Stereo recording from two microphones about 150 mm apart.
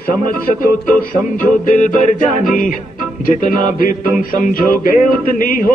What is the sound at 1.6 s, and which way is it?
Music, 60° left (ahead or behind).